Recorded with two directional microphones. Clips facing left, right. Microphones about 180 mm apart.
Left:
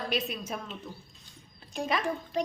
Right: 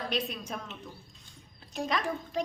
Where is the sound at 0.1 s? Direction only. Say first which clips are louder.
Left 1 dB; 5° left (ahead or behind).